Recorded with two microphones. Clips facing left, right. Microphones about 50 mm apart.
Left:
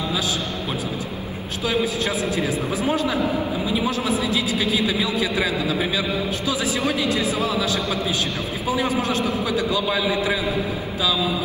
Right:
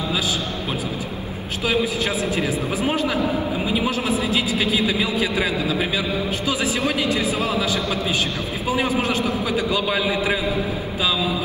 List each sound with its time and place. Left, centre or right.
2.8 s a man's voice: right
6.5 s a man's voice: right
7.1 s a man's voice: right
9.5 s a man's voice: right